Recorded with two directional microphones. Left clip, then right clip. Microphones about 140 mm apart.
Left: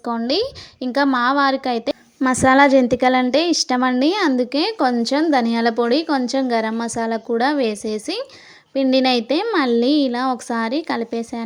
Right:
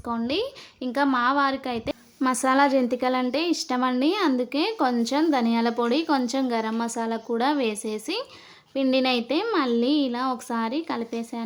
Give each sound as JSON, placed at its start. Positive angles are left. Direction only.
{"t": 0.1, "sound": "speech", "side_deg": 40}